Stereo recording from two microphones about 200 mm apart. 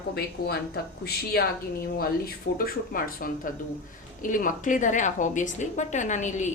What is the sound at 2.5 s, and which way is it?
A woman's voice, 45° left (ahead or behind).